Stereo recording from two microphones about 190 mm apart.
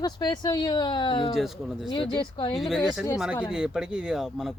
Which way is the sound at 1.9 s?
25° left (ahead or behind).